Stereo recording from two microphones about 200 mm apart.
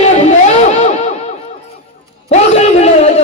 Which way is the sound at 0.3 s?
35° left (ahead or behind).